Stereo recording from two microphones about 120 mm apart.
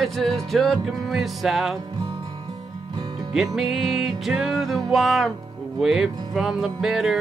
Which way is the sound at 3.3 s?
5° right (ahead or behind).